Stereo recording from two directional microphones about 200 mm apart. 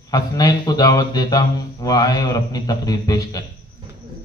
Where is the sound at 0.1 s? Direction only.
20° left (ahead or behind).